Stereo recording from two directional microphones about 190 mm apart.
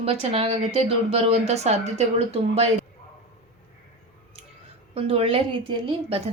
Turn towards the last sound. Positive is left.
turn(degrees=-30)  # may be behind; listen again after turning